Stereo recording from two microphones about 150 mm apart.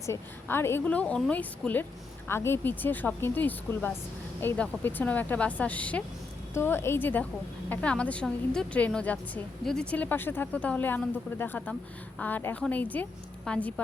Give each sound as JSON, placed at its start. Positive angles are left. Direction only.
{"t": 0.0, "sound": "a woman's voice", "side_deg": 15}